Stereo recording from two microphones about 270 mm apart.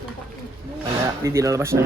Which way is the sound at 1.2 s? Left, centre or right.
Centre.